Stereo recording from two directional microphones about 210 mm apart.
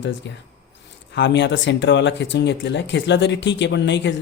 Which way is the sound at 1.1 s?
60° left (ahead or behind).